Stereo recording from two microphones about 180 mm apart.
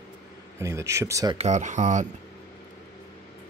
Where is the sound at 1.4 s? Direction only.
40° right (ahead or behind).